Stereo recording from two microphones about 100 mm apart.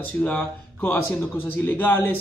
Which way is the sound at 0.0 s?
15° left (ahead or behind).